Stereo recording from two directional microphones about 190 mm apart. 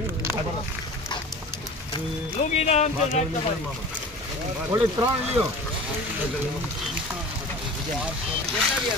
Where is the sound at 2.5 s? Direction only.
35° left (ahead or behind).